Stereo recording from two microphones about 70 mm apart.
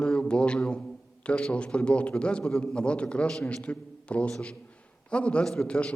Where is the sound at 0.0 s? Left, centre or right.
Centre.